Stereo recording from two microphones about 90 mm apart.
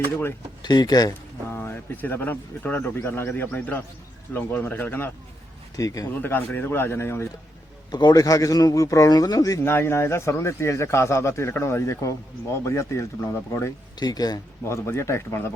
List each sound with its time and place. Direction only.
0.6 s speech: 50° left (ahead or behind)
1.5 s speech: 25° left (ahead or behind)
5.7 s speech: 40° left (ahead or behind)
6.2 s speech: 20° left (ahead or behind)
7.9 s speech: 55° left (ahead or behind)
9.6 s speech: 25° left (ahead or behind)
14.0 s speech: 45° left (ahead or behind)
14.6 s speech: 30° left (ahead or behind)